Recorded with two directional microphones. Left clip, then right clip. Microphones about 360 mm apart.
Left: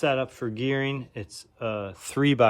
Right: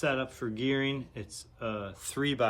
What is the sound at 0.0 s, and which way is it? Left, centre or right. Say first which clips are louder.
Speech: left 6 dB; centre.